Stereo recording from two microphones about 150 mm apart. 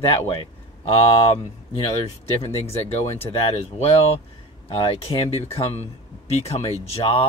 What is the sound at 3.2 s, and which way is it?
Speech, 40° left (ahead or behind).